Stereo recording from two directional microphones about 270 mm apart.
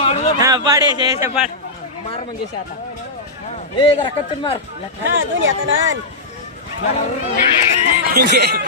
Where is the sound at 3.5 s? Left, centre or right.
Centre.